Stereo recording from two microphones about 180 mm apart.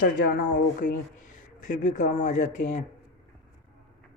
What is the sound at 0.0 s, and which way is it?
Speech, 50° left (ahead or behind).